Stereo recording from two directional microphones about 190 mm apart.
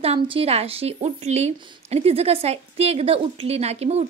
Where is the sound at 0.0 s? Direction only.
30° right (ahead or behind).